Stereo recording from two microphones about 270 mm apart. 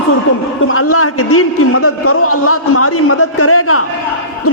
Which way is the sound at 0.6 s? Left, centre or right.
Left.